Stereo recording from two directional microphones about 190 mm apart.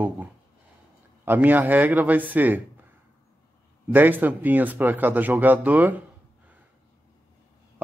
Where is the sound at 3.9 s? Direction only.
10° right (ahead or behind).